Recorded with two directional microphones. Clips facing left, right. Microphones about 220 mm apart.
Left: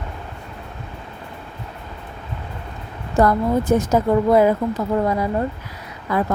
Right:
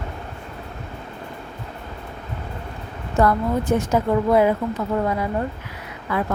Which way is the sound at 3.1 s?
40° left (ahead or behind).